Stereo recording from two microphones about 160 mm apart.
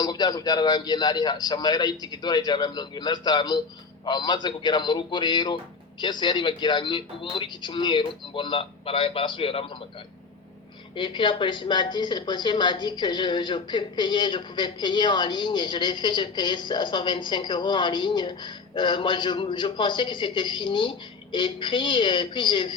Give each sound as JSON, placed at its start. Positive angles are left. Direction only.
{"t": 0.0, "sound": "a woman's voice", "side_deg": 25}
{"t": 10.9, "sound": "a woman's voice", "side_deg": 30}